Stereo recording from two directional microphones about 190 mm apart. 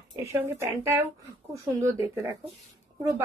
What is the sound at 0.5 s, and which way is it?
Speech, 15° right (ahead or behind).